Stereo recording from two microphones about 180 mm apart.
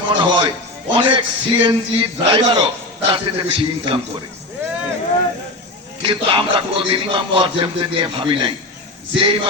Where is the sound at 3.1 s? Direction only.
30° right (ahead or behind).